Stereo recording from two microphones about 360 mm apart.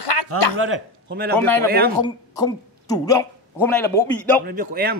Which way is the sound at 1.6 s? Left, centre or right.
Right.